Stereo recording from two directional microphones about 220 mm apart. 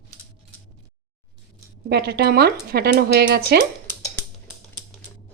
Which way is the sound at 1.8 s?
45° right (ahead or behind).